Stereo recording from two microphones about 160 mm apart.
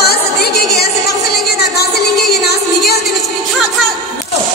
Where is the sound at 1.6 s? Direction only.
80° left.